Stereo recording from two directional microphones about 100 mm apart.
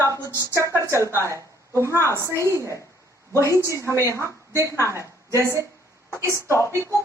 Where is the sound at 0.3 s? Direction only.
30° right (ahead or behind).